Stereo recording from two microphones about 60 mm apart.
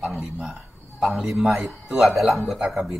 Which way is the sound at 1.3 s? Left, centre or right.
Centre.